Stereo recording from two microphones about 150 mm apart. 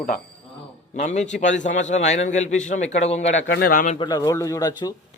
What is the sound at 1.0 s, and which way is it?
A man's voice, 50° left (ahead or behind).